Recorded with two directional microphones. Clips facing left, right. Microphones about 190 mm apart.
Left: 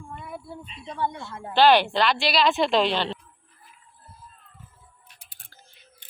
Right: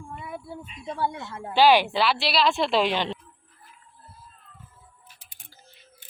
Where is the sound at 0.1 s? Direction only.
Centre (ahead or behind).